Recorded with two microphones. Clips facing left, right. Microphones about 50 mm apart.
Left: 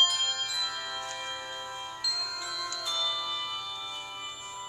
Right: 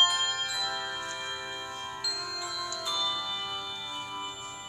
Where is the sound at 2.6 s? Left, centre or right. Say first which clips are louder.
Right 1 dB; centre.